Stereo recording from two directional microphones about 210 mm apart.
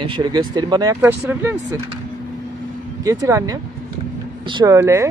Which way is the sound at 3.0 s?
15° right (ahead or behind).